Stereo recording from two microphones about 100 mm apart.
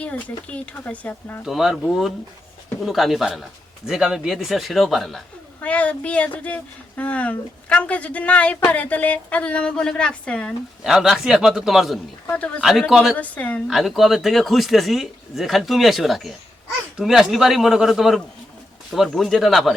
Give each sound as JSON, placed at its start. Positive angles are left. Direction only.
{"t": 0.0, "sound": "speech", "side_deg": 15}
{"t": 1.5, "sound": "speech", "side_deg": 0}
{"t": 5.6, "sound": "speech", "side_deg": 15}
{"t": 10.8, "sound": "speech", "side_deg": -5}
{"t": 12.3, "sound": "speech", "side_deg": 15}
{"t": 12.9, "sound": "speech", "side_deg": 0}
{"t": 13.1, "sound": "speech", "side_deg": 15}
{"t": 13.7, "sound": "speech", "side_deg": 0}